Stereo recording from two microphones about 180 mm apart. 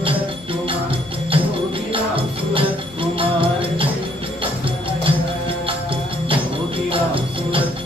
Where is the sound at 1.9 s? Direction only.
30° right (ahead or behind).